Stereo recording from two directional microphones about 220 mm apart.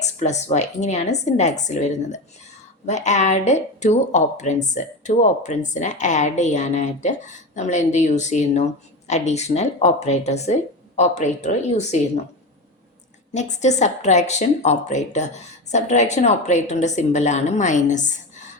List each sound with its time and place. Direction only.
0.0 s speech: 30° left (ahead or behind)
13.3 s speech: 30° left (ahead or behind)